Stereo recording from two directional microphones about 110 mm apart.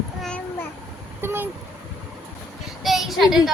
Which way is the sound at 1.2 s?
20° right (ahead or behind).